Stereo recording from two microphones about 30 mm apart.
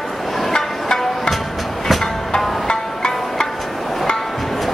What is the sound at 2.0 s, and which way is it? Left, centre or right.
Music, left.